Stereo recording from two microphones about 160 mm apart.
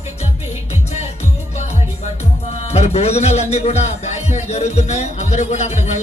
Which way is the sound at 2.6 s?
45° left (ahead or behind).